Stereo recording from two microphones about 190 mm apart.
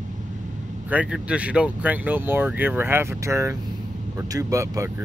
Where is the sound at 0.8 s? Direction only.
5° right (ahead or behind).